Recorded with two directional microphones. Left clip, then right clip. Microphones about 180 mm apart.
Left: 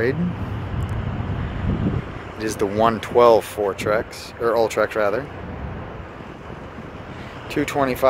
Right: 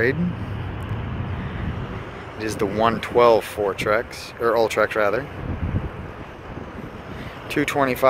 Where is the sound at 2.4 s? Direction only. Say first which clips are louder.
Left 2 dB; 20° left (ahead or behind).